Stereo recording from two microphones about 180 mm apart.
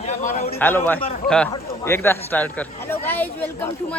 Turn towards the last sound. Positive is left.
turn(degrees=10)  # may be behind; listen again after turning